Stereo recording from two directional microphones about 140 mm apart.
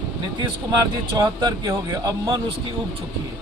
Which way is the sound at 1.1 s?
30° right (ahead or behind).